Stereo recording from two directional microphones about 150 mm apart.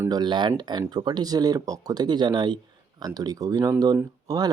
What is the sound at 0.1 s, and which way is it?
Speech, 30° right (ahead or behind).